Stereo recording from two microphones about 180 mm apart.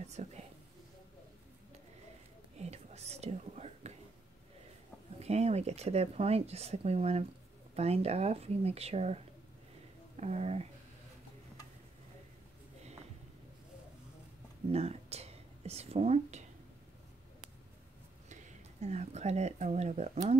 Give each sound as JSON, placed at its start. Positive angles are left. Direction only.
{"t": 0.0, "sound": "a sound", "side_deg": -40}
{"t": 2.7, "sound": "whispering", "side_deg": -35}
{"t": 5.2, "sound": "speech", "side_deg": -35}
{"t": 14.7, "sound": "speech", "side_deg": -35}
{"t": 18.3, "sound": "speech", "side_deg": -40}